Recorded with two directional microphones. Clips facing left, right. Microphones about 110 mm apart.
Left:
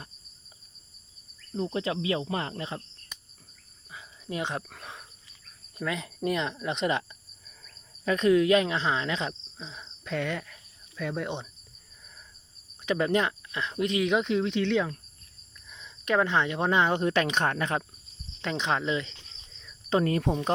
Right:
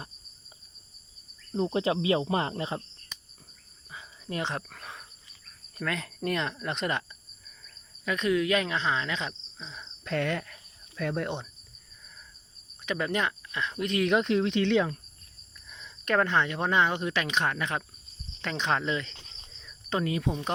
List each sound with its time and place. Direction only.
1.7 s speech: 25° right (ahead or behind)
3.9 s cricket: 10° left (ahead or behind)
5.7 s speech: 15° left (ahead or behind)
8.0 s cricket: 35° left (ahead or behind)
9.6 s cricket: 15° left (ahead or behind)
10.0 s speech: centre (ahead or behind)
12.8 s speech: 25° left (ahead or behind)
13.9 s speech: 5° left (ahead or behind)
16.0 s cricket: 20° left (ahead or behind); by 17.2 s 40° left (ahead or behind)
17.3 s speech: 40° left (ahead or behind)
18.4 s cricket: 20° left (ahead or behind)
20.1 s speech: 45° left (ahead or behind)